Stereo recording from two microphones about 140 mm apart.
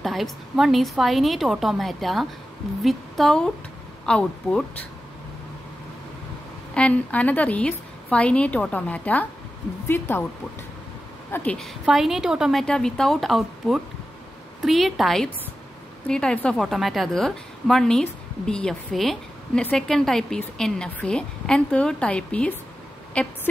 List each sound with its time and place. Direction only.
0.0 s a woman's voice: centre (ahead or behind)
6.7 s a woman's voice: 10° left (ahead or behind)
11.3 s a woman's voice: 5° left (ahead or behind)